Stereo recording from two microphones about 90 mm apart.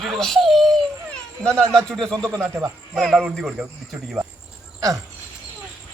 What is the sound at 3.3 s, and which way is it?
Speech, 5° right (ahead or behind).